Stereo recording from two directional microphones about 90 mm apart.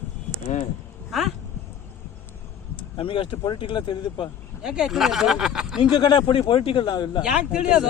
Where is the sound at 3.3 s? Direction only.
55° left (ahead or behind).